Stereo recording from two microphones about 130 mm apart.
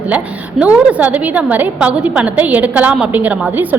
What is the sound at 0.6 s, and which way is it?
A woman's voice, 10° right (ahead or behind).